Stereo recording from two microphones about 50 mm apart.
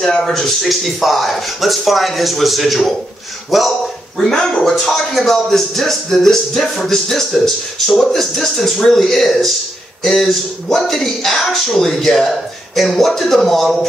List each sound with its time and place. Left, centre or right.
0.2 s speech: centre
4.2 s a man's voice: centre